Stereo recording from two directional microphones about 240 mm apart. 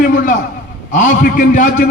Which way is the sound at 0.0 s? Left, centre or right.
Left.